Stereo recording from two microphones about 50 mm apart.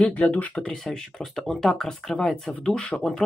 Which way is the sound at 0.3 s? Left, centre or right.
Left.